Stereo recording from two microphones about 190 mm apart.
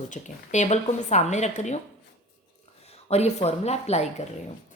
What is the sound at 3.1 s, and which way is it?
A woman's voice, 35° left (ahead or behind).